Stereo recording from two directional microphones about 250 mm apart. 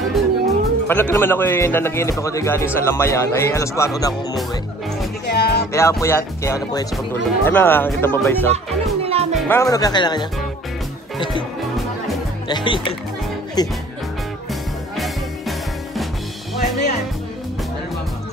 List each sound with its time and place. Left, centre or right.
0.1 s speech: centre
5.2 s music: left
5.7 s speech: centre
9.0 s music: right
9.3 s speech: centre
12.4 s speech: centre
14.5 s music: centre